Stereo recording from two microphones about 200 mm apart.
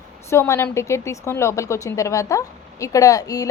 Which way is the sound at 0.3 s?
15° left (ahead or behind).